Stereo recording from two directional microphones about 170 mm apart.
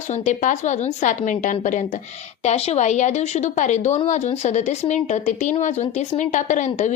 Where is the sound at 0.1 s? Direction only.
45° left (ahead or behind).